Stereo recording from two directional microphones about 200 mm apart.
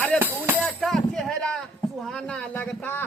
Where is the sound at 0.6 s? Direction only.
Centre (ahead or behind).